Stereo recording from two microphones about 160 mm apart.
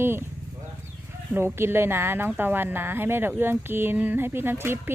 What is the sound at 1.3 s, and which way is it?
Speech, 15° right (ahead or behind).